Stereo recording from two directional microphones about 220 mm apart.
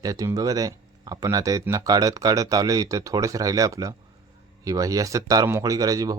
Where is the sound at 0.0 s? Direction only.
15° right (ahead or behind).